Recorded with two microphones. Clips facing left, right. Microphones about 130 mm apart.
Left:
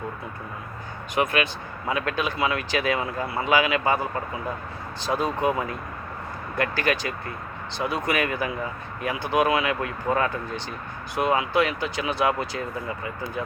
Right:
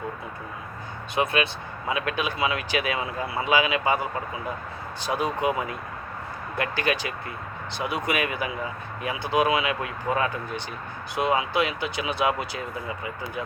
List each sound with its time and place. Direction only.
1.2 s speech: 25° right (ahead or behind)
5.2 s speech: 15° right (ahead or behind)